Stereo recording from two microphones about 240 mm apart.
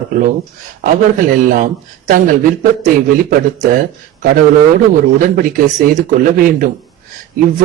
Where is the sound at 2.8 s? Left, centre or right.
Right.